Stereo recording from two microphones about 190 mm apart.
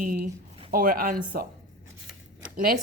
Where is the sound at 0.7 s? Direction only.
45° right (ahead or behind).